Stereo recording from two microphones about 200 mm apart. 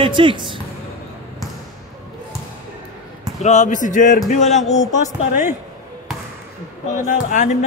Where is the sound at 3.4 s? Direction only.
35° left (ahead or behind).